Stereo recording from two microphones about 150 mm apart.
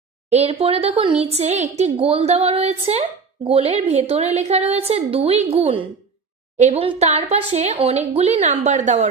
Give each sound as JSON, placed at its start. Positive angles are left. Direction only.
{"t": 0.3, "sound": "a woman's voice", "side_deg": -40}